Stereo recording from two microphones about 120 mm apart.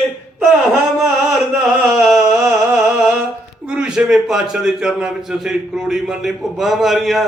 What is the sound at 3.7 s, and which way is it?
A man's voice, 5° right (ahead or behind).